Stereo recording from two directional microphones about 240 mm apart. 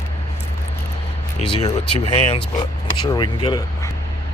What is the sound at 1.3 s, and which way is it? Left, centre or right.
Speech, left.